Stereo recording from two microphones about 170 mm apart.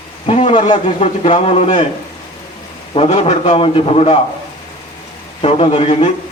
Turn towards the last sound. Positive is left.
turn(degrees=35)  # may be behind; listen again after turning